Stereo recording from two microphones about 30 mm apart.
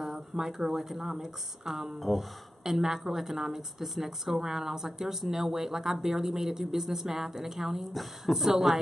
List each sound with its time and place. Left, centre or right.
0.0 s speech: centre
2.0 s speech: centre
2.6 s speech: centre